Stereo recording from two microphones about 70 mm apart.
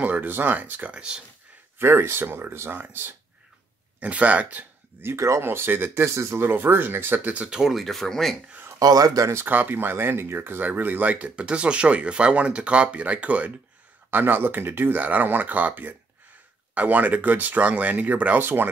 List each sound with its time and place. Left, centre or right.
0.0 s speech: right
1.8 s speech: right
4.0 s speech: centre
5.0 s speech: right; by 8.4 s centre
8.7 s speech: right
9.3 s speech: right